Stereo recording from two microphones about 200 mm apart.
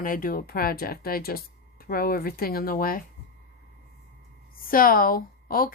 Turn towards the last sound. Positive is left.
turn(degrees=45)  # may be behind; listen again after turning